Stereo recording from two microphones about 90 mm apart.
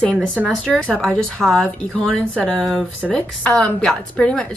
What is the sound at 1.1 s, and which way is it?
A woman's voice, 5° left (ahead or behind).